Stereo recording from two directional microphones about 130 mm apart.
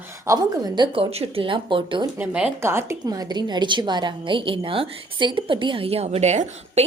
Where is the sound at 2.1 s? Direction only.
10° right (ahead or behind); by 6.8 s 60° right (ahead or behind).